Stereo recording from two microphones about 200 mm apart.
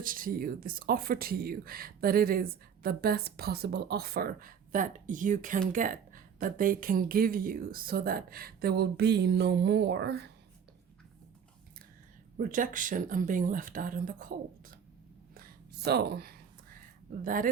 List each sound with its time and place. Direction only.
0.0 s speech: 45° right (ahead or behind)
12.4 s speech: 40° right (ahead or behind)
15.4 s a sound: 55° right (ahead or behind)
17.2 s speech: 45° right (ahead or behind)